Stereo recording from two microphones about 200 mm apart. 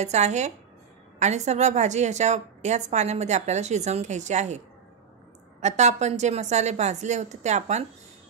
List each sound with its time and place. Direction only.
0.0 s a woman's voice: 35° right (ahead or behind)
5.6 s a woman's voice: 35° right (ahead or behind)